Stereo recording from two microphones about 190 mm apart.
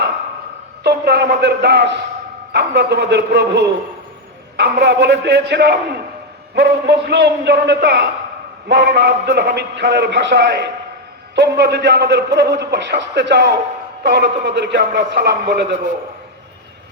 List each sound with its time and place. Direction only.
0.9 s a man's voice: 60° right (ahead or behind)